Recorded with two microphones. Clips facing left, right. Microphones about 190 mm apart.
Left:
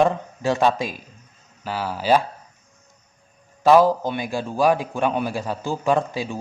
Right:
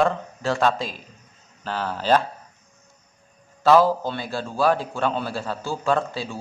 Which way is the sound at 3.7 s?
15° left (ahead or behind).